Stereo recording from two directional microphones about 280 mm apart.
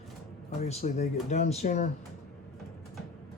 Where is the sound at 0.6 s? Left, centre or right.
Left.